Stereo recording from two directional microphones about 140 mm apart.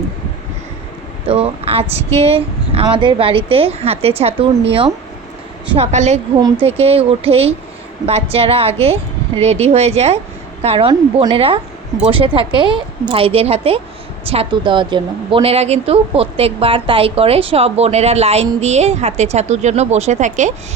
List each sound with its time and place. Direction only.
1.3 s speech: 45° right (ahead or behind)
5.7 s a woman's voice: 50° right (ahead or behind)